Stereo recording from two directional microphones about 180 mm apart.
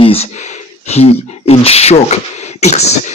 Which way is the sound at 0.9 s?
35° left (ahead or behind).